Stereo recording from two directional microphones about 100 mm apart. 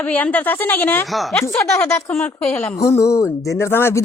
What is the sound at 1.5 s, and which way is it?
Speech, 30° left (ahead or behind).